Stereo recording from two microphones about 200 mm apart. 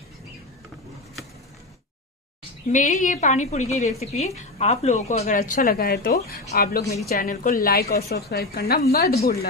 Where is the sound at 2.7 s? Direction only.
40° left (ahead or behind).